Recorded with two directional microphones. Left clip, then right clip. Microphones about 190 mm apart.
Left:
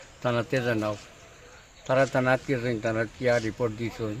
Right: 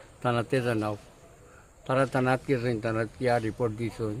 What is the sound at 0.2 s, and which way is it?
Speech, 25° right (ahead or behind).